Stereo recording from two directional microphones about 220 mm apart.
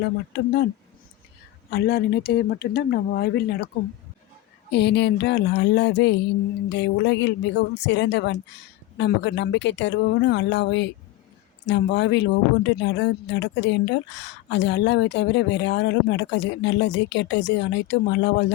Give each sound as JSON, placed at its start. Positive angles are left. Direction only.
{"t": 0.3, "sound": "speech", "side_deg": 45}
{"t": 1.7, "sound": "speech", "side_deg": 45}
{"t": 4.7, "sound": "speech", "side_deg": 50}